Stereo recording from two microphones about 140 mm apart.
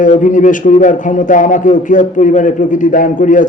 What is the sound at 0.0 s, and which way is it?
A man's voice, 65° left (ahead or behind).